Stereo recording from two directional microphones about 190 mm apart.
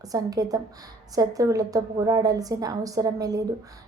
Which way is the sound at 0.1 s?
20° right (ahead or behind).